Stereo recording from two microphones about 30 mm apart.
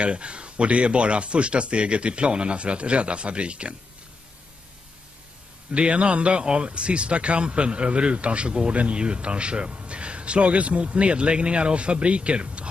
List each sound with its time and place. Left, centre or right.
0.0 s speech: right
5.7 s speech: right